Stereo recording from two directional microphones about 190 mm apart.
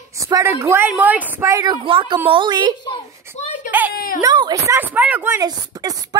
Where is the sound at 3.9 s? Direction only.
50° left (ahead or behind).